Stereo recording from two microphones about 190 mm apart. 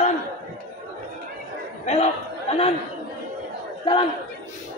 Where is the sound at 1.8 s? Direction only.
35° left (ahead or behind).